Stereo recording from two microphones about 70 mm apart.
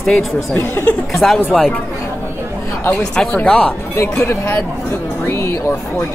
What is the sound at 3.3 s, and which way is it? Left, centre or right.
Speech, left.